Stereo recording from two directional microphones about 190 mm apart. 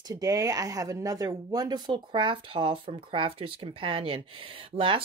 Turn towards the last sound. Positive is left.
turn(degrees=-25)  # may be behind; listen again after turning